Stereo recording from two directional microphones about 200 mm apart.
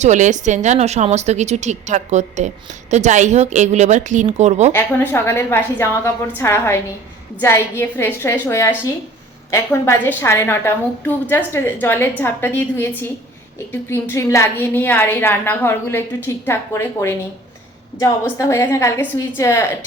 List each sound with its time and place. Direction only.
0.0 s a woman's voice: 35° right (ahead or behind)
4.7 s a woman's voice: 10° left (ahead or behind)